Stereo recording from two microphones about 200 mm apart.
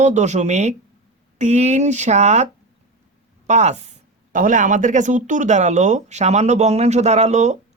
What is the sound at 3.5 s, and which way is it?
Speech, 35° right (ahead or behind).